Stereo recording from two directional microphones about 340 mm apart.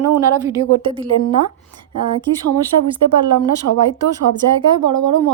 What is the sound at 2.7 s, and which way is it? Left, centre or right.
Speech, right.